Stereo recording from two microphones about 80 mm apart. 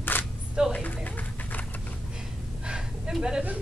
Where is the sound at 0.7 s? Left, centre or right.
Centre.